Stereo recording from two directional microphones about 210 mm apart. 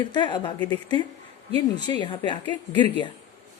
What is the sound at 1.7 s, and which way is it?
Speech, 20° left (ahead or behind).